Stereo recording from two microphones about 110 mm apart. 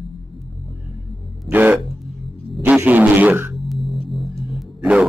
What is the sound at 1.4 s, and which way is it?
Music, 15° right (ahead or behind).